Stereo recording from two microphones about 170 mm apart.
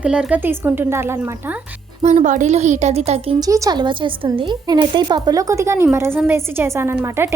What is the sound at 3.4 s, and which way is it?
A woman's voice, 20° right (ahead or behind).